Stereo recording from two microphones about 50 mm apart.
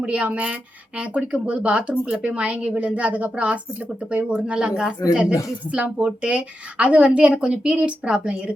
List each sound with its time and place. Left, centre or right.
0.0 s speech: right